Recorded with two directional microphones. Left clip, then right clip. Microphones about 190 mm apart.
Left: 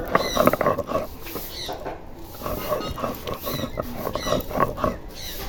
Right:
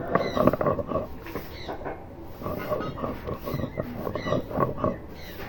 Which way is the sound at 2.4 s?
35° left (ahead or behind).